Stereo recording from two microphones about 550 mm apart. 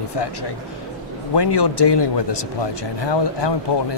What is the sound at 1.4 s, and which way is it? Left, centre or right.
Speech, left.